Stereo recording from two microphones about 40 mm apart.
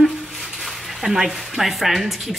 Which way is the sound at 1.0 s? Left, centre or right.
Centre.